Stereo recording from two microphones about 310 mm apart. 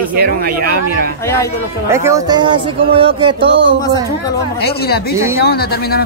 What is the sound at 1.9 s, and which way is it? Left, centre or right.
Speech, centre.